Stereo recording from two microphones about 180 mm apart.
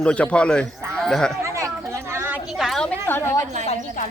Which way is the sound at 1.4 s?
15° right (ahead or behind).